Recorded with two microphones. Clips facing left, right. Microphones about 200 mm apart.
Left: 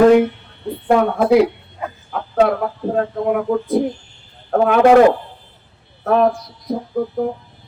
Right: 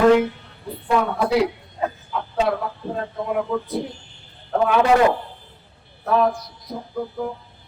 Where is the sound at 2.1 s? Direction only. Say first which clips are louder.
Left 7 dB; 55° left (ahead or behind).